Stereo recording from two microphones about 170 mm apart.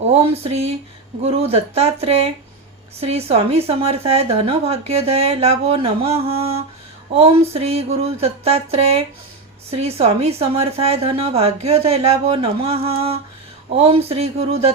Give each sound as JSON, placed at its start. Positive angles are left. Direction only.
{"t": 0.1, "sound": "speech", "side_deg": -35}